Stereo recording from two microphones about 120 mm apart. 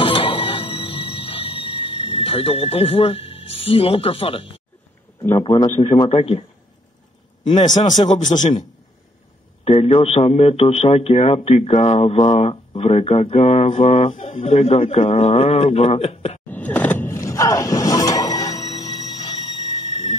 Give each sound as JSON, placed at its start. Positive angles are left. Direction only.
{"t": 0.0, "sound": "music", "side_deg": 45}
{"t": 5.4, "sound": "speech", "side_deg": 40}
{"t": 7.8, "sound": "speech", "side_deg": 90}
{"t": 9.7, "sound": "speech", "side_deg": 60}
{"t": 14.1, "sound": "speech", "side_deg": 50}
{"t": 16.4, "sound": "music", "side_deg": 15}